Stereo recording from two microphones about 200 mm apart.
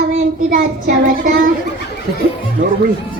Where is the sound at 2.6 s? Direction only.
40° right (ahead or behind).